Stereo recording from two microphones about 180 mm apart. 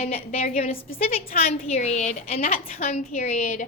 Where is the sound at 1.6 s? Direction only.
35° left (ahead or behind).